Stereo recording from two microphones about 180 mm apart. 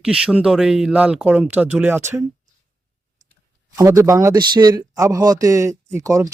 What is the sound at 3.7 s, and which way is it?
A man's voice, 15° right (ahead or behind).